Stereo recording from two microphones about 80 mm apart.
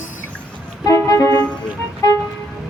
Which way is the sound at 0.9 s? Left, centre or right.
Left.